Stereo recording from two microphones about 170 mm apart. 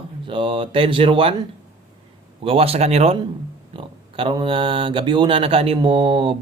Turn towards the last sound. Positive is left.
turn(degrees=-30)  # may be behind; listen again after turning